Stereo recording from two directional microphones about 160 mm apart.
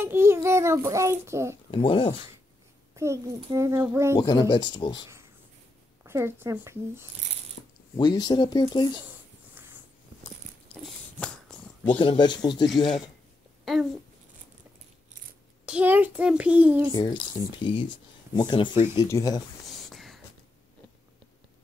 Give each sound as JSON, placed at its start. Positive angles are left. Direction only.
{"t": 0.0, "sound": "a child's voice", "side_deg": -15}
{"t": 1.7, "sound": "speech", "side_deg": 30}
{"t": 3.0, "sound": "a child's voice", "side_deg": -15}
{"t": 4.2, "sound": "speech", "side_deg": 25}
{"t": 6.0, "sound": "a child's voice", "side_deg": -15}
{"t": 7.6, "sound": "mechanisms", "side_deg": 60}
{"t": 7.9, "sound": "speech", "side_deg": 25}
{"t": 10.8, "sound": "a sound", "side_deg": 5}
{"t": 12.0, "sound": "speech", "side_deg": 30}
{"t": 13.7, "sound": "speech", "side_deg": 0}
{"t": 15.6, "sound": "a child's voice", "side_deg": -10}
{"t": 16.9, "sound": "speech", "side_deg": 30}
{"t": 19.7, "sound": "a sound", "side_deg": 0}